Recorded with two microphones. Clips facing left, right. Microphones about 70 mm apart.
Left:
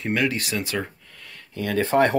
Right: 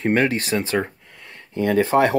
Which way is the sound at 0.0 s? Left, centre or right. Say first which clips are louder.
Right 5 dB; right.